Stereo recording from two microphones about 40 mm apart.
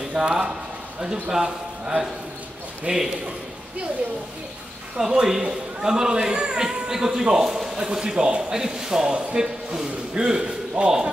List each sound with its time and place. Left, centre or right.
0.1 s speech: right
1.3 s a man's voice: centre
4.9 s a man's voice: centre
10.8 s speech: right